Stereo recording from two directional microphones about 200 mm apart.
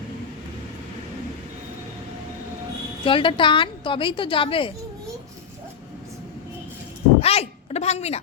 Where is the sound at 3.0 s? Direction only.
25° left (ahead or behind).